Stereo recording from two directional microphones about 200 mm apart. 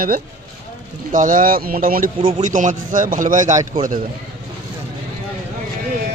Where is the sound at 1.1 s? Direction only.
40° right (ahead or behind).